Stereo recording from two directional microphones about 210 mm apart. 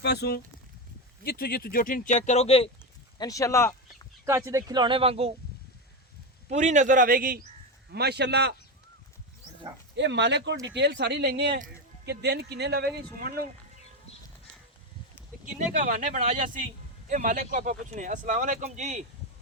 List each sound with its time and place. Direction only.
0.0 s speech: 50° left (ahead or behind); by 2.6 s 30° left (ahead or behind)
3.2 s speech: 15° left (ahead or behind)
4.3 s speech: 15° right (ahead or behind)
6.5 s speech: 35° right (ahead or behind); by 8.5 s 55° right (ahead or behind)
9.9 s speech: 55° right (ahead or behind)
15.7 s speech: 40° right (ahead or behind)